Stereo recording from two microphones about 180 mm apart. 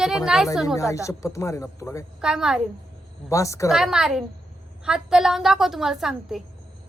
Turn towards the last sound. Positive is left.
turn(degrees=0)  # may be behind; listen again after turning